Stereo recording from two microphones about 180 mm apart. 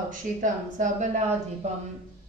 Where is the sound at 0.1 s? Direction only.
45° right (ahead or behind).